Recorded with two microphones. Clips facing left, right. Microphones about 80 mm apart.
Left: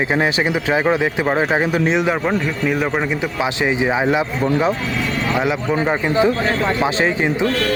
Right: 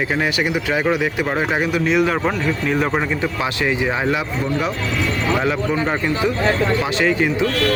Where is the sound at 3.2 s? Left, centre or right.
Centre.